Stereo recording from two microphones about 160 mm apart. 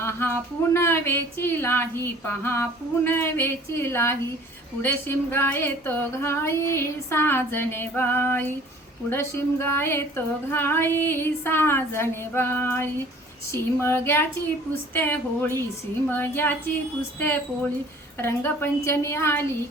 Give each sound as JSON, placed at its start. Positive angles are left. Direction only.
{"t": 0.0, "sound": "speech", "side_deg": 15}